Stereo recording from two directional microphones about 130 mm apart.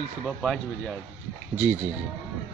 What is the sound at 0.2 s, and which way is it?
Speech, 5° left (ahead or behind).